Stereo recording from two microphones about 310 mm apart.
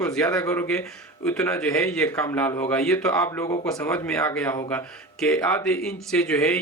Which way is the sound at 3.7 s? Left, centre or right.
Centre.